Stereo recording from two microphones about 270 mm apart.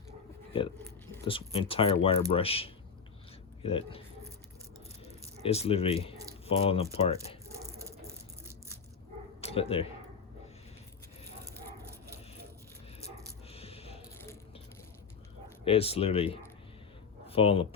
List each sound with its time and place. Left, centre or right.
1.3 s speech: centre
5.0 s speech: left
7.4 s a sound: centre
9.4 s speech: left
13.5 s a sound: left
15.6 s speech: left